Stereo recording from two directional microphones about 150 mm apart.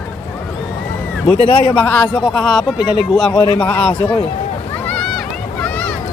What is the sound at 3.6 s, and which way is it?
Speech, 10° left (ahead or behind).